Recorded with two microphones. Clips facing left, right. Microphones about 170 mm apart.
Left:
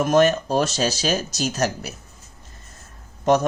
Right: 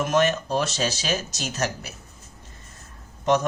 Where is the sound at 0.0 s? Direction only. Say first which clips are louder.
Left 5 dB; 40° left (ahead or behind).